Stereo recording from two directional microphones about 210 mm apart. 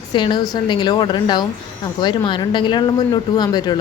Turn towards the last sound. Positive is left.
turn(degrees=20)  # may be behind; listen again after turning